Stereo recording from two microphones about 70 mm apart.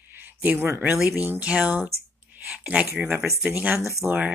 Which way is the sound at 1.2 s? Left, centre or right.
Right.